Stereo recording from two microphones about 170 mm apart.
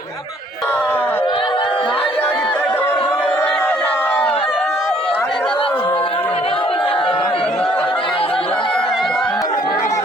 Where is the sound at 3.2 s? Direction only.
5° left (ahead or behind).